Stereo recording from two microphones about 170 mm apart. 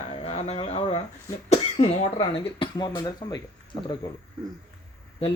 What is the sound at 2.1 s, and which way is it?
Speech, 25° left (ahead or behind).